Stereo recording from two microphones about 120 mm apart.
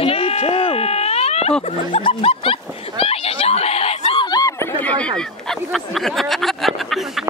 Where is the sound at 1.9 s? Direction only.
45° left (ahead or behind).